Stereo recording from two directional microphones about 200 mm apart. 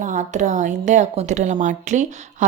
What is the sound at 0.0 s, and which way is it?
A woman's voice, 40° right (ahead or behind).